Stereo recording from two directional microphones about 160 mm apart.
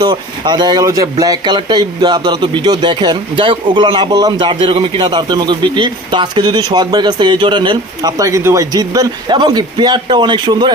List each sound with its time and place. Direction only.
0.0 s speech: 30° right (ahead or behind)